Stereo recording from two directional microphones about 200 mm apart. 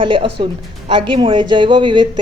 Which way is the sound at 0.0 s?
25° right (ahead or behind).